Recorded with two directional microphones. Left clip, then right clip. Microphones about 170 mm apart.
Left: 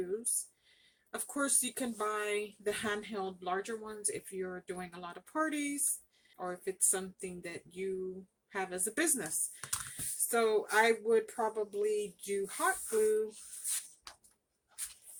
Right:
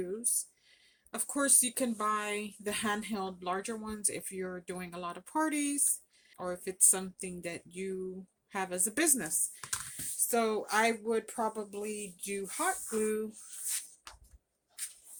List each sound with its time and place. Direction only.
1.1 s speech: 40° right (ahead or behind)